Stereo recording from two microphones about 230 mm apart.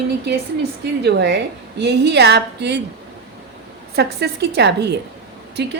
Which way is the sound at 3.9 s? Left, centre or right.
Right.